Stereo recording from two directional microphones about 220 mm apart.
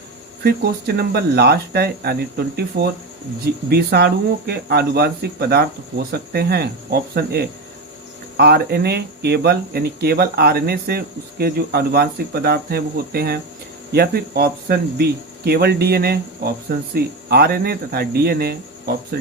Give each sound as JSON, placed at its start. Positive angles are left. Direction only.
{"t": 0.4, "sound": "speech", "side_deg": -45}